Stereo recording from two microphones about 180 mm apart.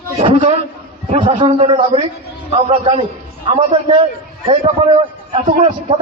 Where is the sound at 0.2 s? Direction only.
35° right (ahead or behind).